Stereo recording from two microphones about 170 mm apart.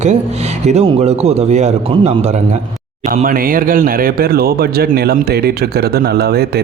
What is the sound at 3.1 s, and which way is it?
Speech, 55° right (ahead or behind).